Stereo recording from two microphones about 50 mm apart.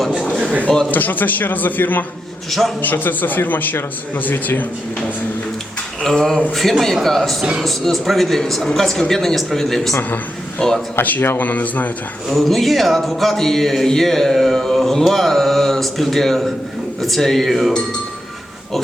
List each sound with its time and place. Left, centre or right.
0.9 s a man's voice: left
2.5 s a man's voice: centre
2.8 s a man's voice: left
6.0 s a man's voice: centre
11.0 s a man's voice: left
12.3 s a man's voice: centre